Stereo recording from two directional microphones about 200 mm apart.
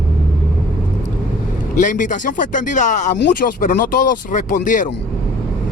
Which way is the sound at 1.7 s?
40° left (ahead or behind).